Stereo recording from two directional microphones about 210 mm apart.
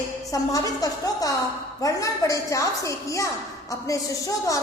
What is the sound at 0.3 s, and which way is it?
A woman's voice, 15° left (ahead or behind).